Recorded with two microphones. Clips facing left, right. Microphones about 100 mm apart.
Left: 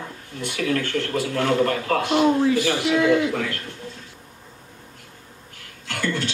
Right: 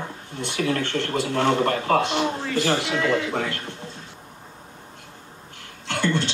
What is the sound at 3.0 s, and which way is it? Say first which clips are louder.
Speech: left 8 dB; 15° left (ahead or behind).